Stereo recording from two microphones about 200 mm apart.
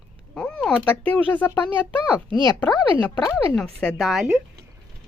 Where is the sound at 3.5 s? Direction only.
5° left (ahead or behind).